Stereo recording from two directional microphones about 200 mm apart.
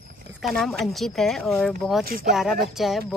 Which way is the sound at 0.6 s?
Centre (ahead or behind).